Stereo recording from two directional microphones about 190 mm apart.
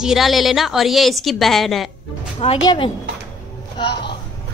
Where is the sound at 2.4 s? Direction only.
25° left (ahead or behind).